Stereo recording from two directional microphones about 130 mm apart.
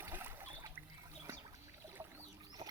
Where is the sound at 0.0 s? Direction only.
15° right (ahead or behind).